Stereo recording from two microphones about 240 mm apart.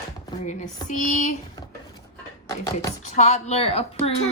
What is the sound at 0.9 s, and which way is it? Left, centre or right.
Speech, left.